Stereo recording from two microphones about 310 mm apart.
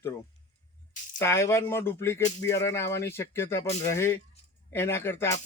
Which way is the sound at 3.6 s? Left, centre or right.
Left.